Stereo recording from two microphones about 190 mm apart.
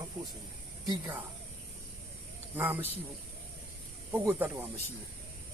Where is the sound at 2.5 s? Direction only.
10° right (ahead or behind).